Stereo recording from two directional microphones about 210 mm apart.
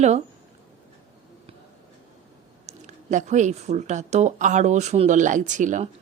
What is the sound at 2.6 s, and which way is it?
Speech, 35° right (ahead or behind).